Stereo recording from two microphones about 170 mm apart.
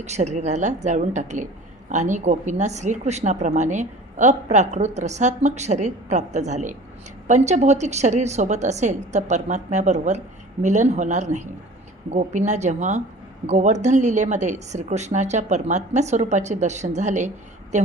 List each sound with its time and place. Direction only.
0.0 s speech: 40° right (ahead or behind)